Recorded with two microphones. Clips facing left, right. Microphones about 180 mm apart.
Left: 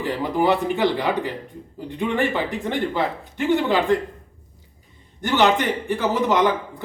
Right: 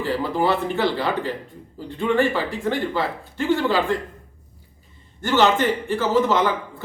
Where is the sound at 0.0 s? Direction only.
15° left (ahead or behind).